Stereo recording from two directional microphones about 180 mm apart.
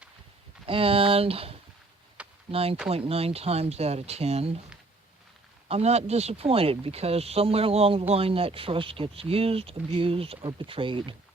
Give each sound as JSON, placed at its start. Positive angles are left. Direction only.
{"t": 0.7, "sound": "speech", "side_deg": -30}
{"t": 5.6, "sound": "speech", "side_deg": -35}